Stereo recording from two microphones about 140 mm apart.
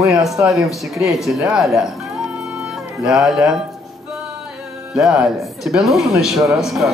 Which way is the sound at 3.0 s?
5° right (ahead or behind).